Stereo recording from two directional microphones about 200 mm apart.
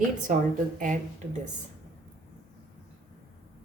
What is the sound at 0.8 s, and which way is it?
Speech, 40° right (ahead or behind).